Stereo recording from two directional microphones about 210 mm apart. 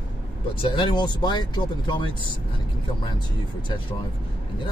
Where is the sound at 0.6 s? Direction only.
25° left (ahead or behind).